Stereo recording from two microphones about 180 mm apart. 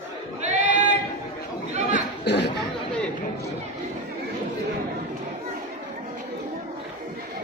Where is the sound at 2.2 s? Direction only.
70° left (ahead or behind).